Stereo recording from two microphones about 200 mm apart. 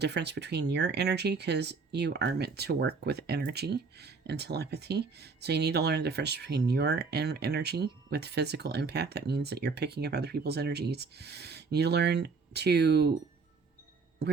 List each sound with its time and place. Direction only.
0.0 s speech: 55° right (ahead or behind)